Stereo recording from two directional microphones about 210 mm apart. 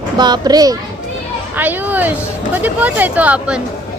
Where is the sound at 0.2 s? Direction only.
20° right (ahead or behind).